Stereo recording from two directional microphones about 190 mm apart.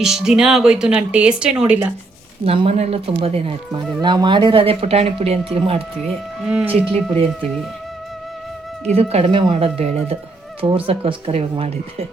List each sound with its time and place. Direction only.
0.0 s speech: 5° right (ahead or behind)
2.4 s speech: 30° right (ahead or behind)
6.4 s speech: 5° right (ahead or behind)
6.9 s speech: 30° right (ahead or behind)
9.0 s speech: 30° right (ahead or behind)